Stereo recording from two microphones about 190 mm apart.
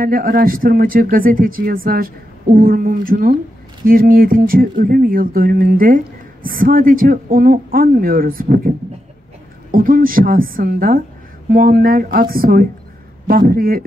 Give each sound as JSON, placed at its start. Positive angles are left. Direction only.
{"t": 0.0, "sound": "speech", "side_deg": -50}